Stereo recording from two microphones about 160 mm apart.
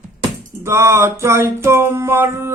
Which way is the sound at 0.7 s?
15° right (ahead or behind).